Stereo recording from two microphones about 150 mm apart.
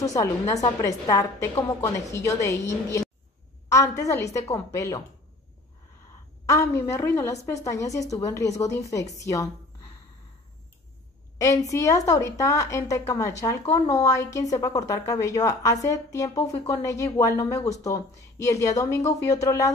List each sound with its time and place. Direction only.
0.0 s a woman's voice: 20° left (ahead or behind)
6.4 s a woman's voice: 20° left (ahead or behind)
11.3 s a woman's voice: 20° left (ahead or behind)